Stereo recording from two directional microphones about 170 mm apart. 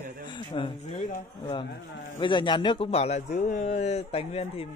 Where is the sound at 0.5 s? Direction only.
30° left (ahead or behind).